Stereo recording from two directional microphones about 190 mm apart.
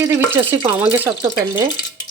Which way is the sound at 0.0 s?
15° right (ahead or behind).